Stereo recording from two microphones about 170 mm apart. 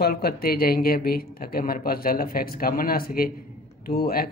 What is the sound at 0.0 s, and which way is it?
Speech, 65° left (ahead or behind).